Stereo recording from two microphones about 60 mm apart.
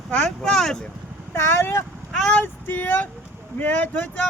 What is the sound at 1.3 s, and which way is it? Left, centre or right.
Speech, left.